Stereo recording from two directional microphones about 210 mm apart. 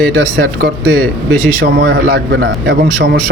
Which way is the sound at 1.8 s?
55° right (ahead or behind).